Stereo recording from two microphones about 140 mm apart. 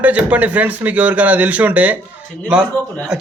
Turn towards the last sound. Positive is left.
turn(degrees=10)  # may be behind; listen again after turning